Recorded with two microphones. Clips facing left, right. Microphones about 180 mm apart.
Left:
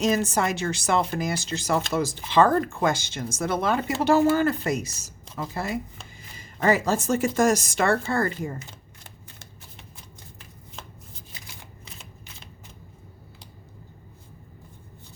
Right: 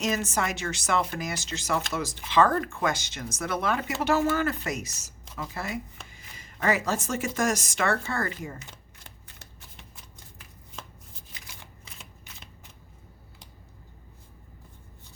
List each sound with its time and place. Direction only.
0.0 s speech: 30° left (ahead or behind)